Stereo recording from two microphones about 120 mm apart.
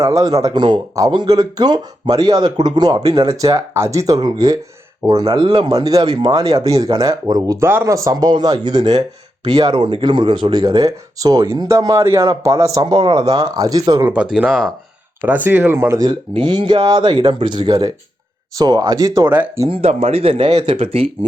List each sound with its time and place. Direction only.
0.0 s speech: 30° right (ahead or behind)
7.6 s speech: 20° right (ahead or behind)
12.8 s speech: 35° right (ahead or behind)
14.0 s speech: 15° right (ahead or behind)
16.0 s speech: 40° right (ahead or behind)
19.6 s speech: 50° right (ahead or behind)